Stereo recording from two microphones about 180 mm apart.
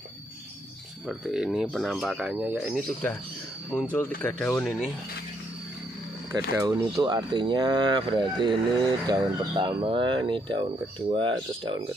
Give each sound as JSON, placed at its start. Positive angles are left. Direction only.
{"t": 1.0, "sound": "speech", "side_deg": 0}
{"t": 3.7, "sound": "speech", "side_deg": 10}
{"t": 6.5, "sound": "speech", "side_deg": -20}